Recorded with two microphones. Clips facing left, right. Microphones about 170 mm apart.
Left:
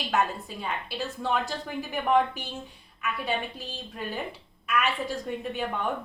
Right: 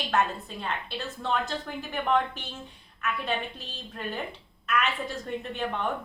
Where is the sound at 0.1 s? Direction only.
10° left (ahead or behind).